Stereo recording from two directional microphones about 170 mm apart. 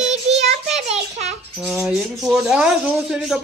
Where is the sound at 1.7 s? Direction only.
Centre (ahead or behind).